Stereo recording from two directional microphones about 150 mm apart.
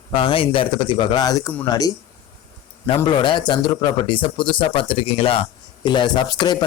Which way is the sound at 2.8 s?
35° left (ahead or behind).